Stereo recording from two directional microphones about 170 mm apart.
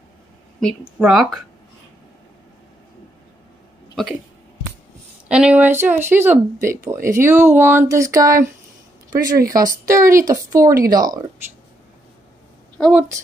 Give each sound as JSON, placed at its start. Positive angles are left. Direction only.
{"t": 0.6, "sound": "speech", "side_deg": 0}
{"t": 3.9, "sound": "speech", "side_deg": 0}
{"t": 5.3, "sound": "speech", "side_deg": -5}
{"t": 9.5, "sound": "speech", "side_deg": -20}
{"t": 12.8, "sound": "speech", "side_deg": 0}